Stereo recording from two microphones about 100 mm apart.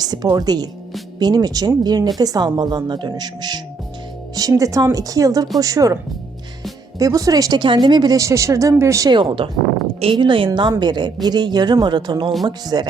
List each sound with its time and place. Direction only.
0.0 s speech: 40° right (ahead or behind)
7.0 s speech: 35° right (ahead or behind)
9.0 s speech: 55° right (ahead or behind)